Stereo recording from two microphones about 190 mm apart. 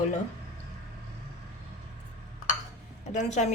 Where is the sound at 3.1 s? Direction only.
40° left (ahead or behind).